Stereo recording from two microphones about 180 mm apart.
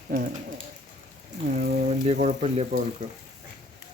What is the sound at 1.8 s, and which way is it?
Speech, 40° right (ahead or behind).